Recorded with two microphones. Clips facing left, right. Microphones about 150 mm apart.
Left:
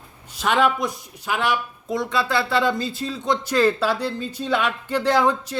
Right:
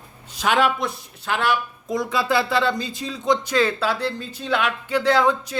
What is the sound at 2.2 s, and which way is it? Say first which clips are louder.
Speech: right 2 dB; 15° right (ahead or behind).